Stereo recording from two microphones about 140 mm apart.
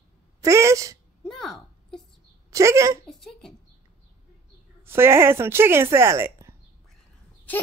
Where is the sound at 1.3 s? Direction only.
Centre (ahead or behind).